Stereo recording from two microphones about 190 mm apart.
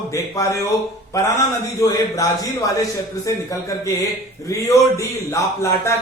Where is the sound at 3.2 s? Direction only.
15° left (ahead or behind).